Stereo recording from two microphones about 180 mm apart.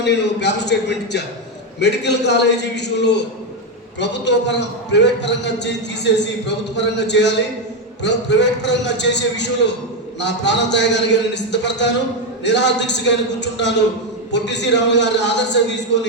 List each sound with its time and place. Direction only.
0.0 s a man's voice: 70° left (ahead or behind)